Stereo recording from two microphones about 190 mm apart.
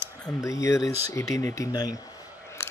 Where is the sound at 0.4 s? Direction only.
15° left (ahead or behind).